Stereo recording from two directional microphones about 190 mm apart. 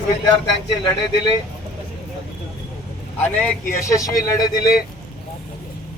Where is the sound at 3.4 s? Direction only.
10° left (ahead or behind).